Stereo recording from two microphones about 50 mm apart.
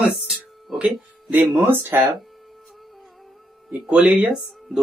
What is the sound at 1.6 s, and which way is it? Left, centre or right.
Speech, right.